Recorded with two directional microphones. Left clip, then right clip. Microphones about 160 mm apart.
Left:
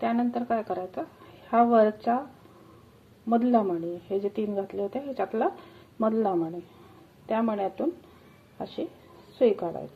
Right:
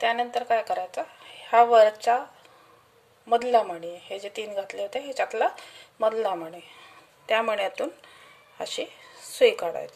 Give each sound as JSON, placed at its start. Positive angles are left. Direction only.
{"t": 0.0, "sound": "speech", "side_deg": -15}
{"t": 3.3, "sound": "speech", "side_deg": -20}
{"t": 7.2, "sound": "speech", "side_deg": -25}
{"t": 9.4, "sound": "speech", "side_deg": -30}